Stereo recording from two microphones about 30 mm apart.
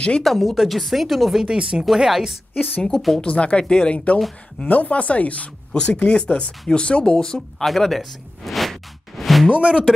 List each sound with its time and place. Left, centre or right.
0.2 s speech: centre
1.4 s speech: right
2.0 s a woman's voice: centre
2.9 s speech: centre
3.2 s speech: left
3.6 s speech: left
3.9 s speech: left
5.7 s speech: left
7.6 s a sound: centre
9.6 s speech: right